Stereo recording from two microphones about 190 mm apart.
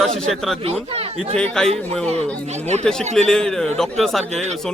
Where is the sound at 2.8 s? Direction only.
5° left (ahead or behind).